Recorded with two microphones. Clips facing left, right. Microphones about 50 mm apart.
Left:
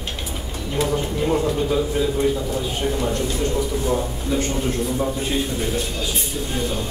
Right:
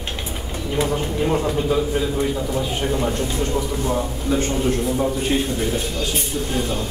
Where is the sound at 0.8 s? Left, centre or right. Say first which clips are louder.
Even; centre.